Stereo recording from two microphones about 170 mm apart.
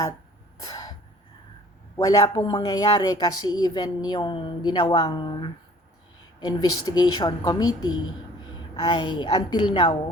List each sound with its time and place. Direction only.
0.6 s sneeze: 20° left (ahead or behind)
2.0 s speech: 20° left (ahead or behind)